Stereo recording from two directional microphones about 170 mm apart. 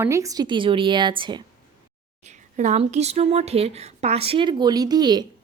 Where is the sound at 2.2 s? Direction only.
45° right (ahead or behind); by 5.2 s 25° right (ahead or behind).